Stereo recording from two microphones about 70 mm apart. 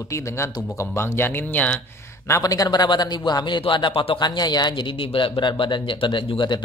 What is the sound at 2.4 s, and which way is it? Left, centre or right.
Speech, left.